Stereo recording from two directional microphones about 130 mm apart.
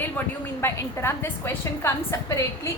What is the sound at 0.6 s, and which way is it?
A woman's voice, 20° left (ahead or behind).